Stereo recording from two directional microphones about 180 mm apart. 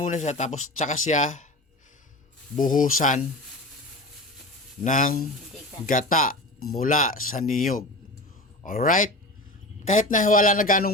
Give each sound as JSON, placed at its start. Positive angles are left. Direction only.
{"t": 0.0, "sound": "speech", "side_deg": 40}
{"t": 2.6, "sound": "speech", "side_deg": 45}
{"t": 4.8, "sound": "speech", "side_deg": 50}